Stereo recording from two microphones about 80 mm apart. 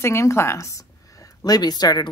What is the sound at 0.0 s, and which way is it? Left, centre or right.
A woman's voice, left.